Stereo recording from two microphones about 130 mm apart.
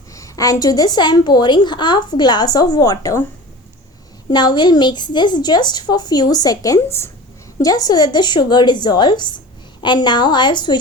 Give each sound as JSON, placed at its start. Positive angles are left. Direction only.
{"t": 0.1, "sound": "a woman's voice", "side_deg": 25}
{"t": 4.3, "sound": "a woman's voice", "side_deg": 35}